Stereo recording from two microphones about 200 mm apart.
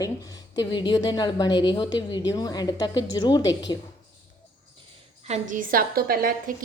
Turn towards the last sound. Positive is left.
turn(degrees=-45)  # may be behind; listen again after turning